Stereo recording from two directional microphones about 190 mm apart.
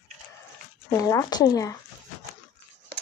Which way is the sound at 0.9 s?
15° left (ahead or behind).